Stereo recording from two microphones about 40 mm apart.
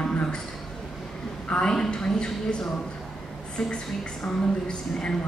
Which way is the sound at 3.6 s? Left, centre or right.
Centre.